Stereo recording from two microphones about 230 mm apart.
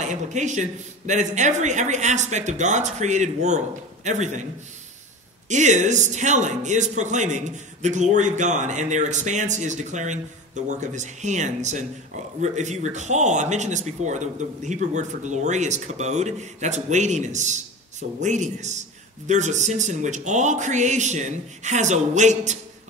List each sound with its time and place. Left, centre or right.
0.1 s a man's voice: right
5.5 s a man's voice: right